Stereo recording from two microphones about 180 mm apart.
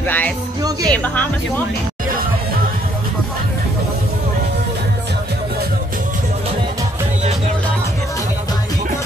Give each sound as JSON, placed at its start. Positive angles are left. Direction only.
{"t": 0.0, "sound": "speech", "side_deg": 10}
{"t": 0.6, "sound": "speech", "side_deg": -20}
{"t": 0.9, "sound": "speech", "side_deg": 10}